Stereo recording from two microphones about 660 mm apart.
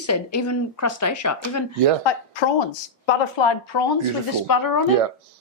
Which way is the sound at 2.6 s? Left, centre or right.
Left.